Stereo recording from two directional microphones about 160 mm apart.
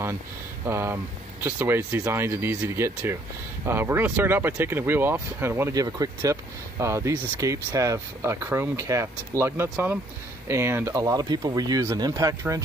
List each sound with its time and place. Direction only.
0.7 s speech: 15° right (ahead or behind)